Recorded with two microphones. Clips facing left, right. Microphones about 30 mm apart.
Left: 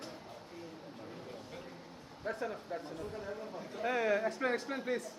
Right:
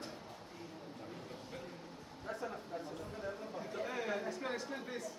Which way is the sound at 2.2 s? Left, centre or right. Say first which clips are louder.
Left 5 dB; left.